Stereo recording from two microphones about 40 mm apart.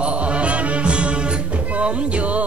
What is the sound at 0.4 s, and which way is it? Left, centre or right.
Music, right.